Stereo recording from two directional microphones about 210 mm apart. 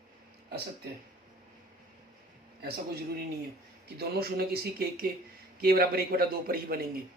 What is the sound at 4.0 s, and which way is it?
A man's voice, 45° right (ahead or behind).